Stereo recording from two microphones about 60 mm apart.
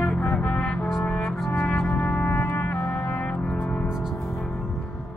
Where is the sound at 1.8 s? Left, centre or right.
Left.